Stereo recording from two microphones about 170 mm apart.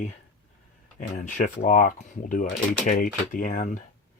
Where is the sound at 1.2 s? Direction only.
50° left (ahead or behind).